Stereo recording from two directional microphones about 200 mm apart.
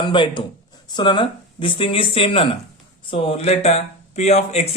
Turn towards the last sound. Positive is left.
turn(degrees=35)  # may be behind; listen again after turning